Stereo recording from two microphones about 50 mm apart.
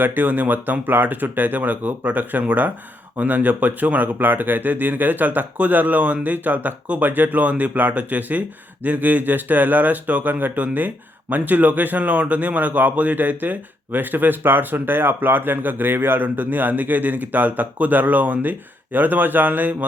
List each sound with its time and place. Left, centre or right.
0.0 s speech: right